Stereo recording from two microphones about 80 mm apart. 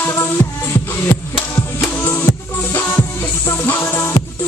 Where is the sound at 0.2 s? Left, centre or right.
Left.